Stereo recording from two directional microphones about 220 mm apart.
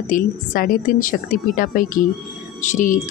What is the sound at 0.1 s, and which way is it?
Speech, 40° left (ahead or behind).